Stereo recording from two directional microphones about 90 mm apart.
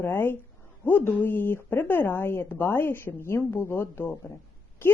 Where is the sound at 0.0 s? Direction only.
25° left (ahead or behind).